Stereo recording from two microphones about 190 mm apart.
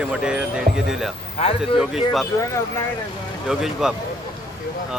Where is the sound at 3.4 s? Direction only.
Centre (ahead or behind).